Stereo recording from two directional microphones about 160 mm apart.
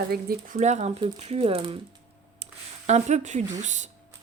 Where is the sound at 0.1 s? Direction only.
70° right (ahead or behind).